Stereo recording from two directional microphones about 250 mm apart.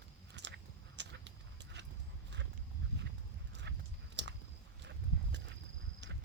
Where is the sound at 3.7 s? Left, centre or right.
Right.